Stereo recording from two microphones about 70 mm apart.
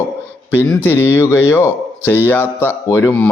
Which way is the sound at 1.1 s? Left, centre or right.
Left.